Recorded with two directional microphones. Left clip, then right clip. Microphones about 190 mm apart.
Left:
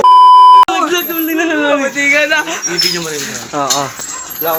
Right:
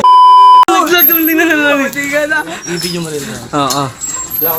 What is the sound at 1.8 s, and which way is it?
Speech, 55° left (ahead or behind).